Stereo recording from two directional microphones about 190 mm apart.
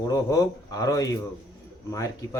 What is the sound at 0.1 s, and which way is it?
Speech, 20° left (ahead or behind).